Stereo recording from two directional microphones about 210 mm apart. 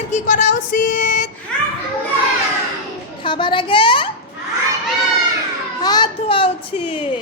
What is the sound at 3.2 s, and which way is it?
Speech, 25° left (ahead or behind).